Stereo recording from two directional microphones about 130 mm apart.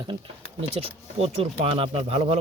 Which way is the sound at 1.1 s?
50° right (ahead or behind).